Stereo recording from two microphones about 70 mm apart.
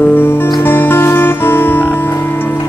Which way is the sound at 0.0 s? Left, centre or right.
Left.